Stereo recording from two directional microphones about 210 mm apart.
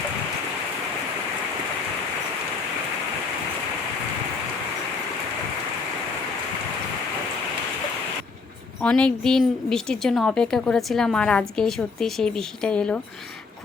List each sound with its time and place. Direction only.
8.8 s a woman's voice: 5° left (ahead or behind)